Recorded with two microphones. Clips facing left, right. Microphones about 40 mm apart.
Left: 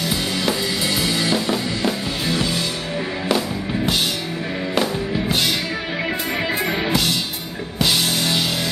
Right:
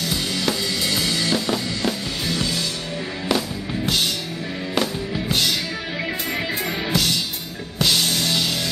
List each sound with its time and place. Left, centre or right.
0.1 s music: centre
6.6 s music: centre